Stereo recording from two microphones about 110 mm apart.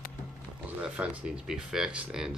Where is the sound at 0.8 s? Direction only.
10° right (ahead or behind).